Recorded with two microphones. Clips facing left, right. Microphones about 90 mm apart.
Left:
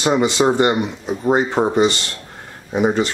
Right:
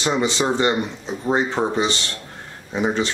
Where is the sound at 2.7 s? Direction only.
10° left (ahead or behind).